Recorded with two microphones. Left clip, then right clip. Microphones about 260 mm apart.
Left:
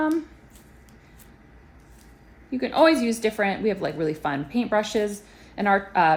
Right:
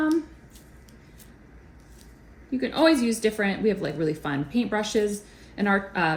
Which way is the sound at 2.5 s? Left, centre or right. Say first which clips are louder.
Left 2 dB; left.